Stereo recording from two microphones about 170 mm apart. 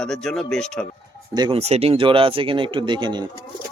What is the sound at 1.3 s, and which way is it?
Speech, 25° right (ahead or behind).